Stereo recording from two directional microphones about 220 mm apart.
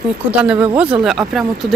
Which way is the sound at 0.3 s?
5° right (ahead or behind).